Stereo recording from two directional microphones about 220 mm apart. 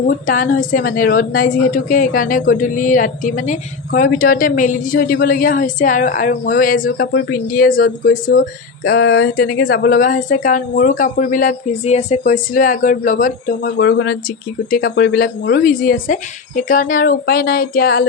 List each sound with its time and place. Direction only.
0.0 s a woman's voice: 40° left (ahead or behind)
14.7 s a woman's voice: 40° left (ahead or behind)